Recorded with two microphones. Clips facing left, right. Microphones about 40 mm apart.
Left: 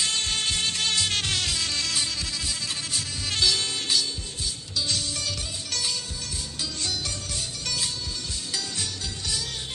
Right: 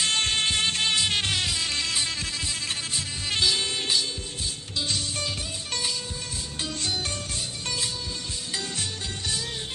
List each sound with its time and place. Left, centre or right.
0.0 s music: right
2.0 s music: right
3.5 s music: centre
4.8 s music: right
6.6 s music: right
7.6 s music: right
8.7 s music: right